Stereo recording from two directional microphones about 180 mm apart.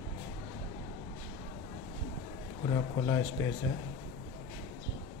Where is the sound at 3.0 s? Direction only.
20° left (ahead or behind).